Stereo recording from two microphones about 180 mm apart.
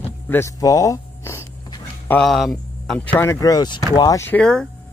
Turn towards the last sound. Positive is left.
turn(degrees=5)  # may be behind; listen again after turning